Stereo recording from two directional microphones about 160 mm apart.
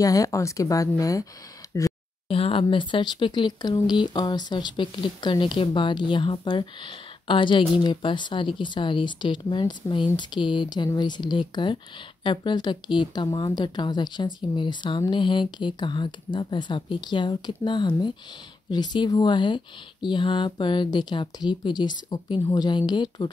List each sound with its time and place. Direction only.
0.0 s speech: 20° left (ahead or behind)
2.2 s speech: 35° left (ahead or behind)